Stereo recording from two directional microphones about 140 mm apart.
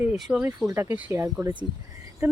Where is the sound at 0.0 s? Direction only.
10° right (ahead or behind).